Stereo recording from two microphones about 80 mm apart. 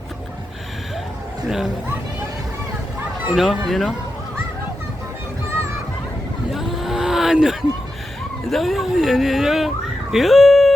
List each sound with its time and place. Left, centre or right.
1.5 s speech: centre
3.3 s speech: centre
6.5 s vehicle: centre
8.4 s speech: centre